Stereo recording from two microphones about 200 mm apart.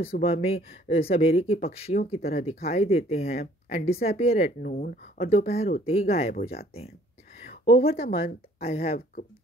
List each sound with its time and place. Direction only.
0.0 s speech: 30° left (ahead or behind)
5.2 s speech: 35° left (ahead or behind)
6.3 s speech: 50° left (ahead or behind)
7.4 s a sound: 30° left (ahead or behind)
7.9 s speech: 50° left (ahead or behind)
8.6 s speech: 30° left (ahead or behind)